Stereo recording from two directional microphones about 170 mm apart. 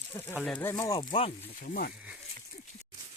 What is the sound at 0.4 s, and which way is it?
Speech, 10° left (ahead or behind).